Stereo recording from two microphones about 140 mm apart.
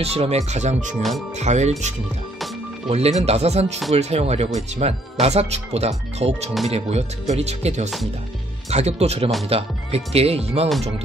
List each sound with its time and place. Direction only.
0.0 s speech: 45° right (ahead or behind)